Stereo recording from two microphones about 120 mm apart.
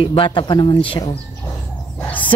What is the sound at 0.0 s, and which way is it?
Speech, 45° left (ahead or behind).